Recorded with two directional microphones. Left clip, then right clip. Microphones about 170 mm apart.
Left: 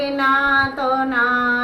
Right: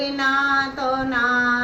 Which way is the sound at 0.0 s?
15° left (ahead or behind).